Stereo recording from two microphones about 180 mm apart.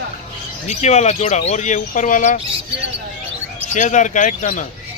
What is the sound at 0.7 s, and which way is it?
Speech, 40° left (ahead or behind).